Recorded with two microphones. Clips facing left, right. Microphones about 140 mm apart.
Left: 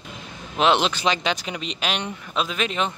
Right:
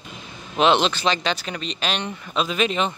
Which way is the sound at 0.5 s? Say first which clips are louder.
Right 2 dB; 5° left (ahead or behind).